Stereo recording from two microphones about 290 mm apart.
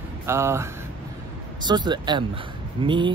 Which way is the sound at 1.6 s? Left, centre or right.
Centre.